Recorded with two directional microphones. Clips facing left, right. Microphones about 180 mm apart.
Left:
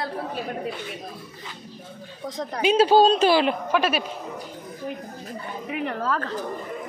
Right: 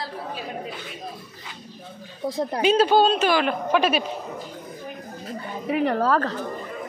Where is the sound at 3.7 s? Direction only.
5° left (ahead or behind).